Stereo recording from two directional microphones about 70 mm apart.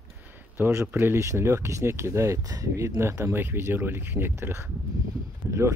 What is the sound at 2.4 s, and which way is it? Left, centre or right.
Speech, right.